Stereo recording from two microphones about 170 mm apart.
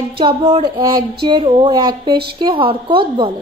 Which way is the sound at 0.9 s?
60° right (ahead or behind).